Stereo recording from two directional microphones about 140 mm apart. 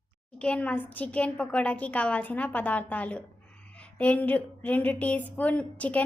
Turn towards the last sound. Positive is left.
turn(degrees=10)  # may be behind; listen again after turning